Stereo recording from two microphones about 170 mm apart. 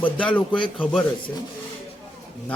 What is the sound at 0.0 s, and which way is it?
A man's voice, 10° left (ahead or behind).